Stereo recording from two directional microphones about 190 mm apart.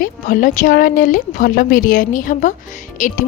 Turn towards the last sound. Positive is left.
turn(degrees=40)  # may be behind; listen again after turning